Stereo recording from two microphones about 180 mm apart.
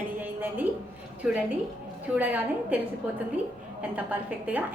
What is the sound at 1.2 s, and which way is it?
A woman's voice, 5° right (ahead or behind).